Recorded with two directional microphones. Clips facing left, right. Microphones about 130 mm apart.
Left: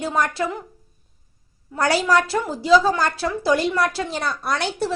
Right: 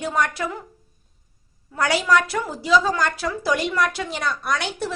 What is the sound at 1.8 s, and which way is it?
A woman's voice, 35° left (ahead or behind).